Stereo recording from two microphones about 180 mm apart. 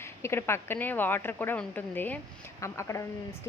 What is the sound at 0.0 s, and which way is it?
Speech, 15° left (ahead or behind).